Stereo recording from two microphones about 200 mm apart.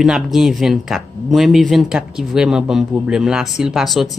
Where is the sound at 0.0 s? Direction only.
Centre (ahead or behind).